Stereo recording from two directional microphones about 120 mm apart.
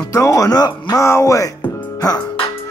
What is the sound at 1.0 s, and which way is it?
Music, 25° left (ahead or behind).